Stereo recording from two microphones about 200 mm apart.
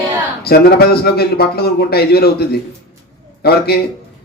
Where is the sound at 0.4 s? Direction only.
50° left (ahead or behind).